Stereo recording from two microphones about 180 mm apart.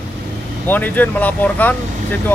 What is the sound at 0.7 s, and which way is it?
Speech, 10° left (ahead or behind).